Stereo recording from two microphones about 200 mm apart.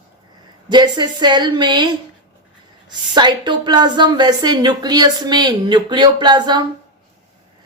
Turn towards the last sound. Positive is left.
turn(degrees=-20)  # may be behind; listen again after turning